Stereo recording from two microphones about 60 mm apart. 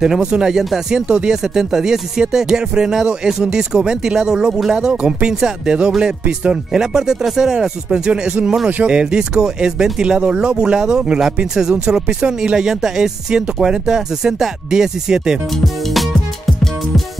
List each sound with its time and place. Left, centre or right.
0.0 s speech: centre
8.6 s speech: right
8.9 s speech: centre
15.5 s music: centre